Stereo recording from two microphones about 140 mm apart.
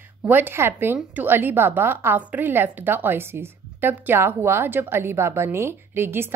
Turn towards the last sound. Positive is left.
turn(degrees=-15)  # may be behind; listen again after turning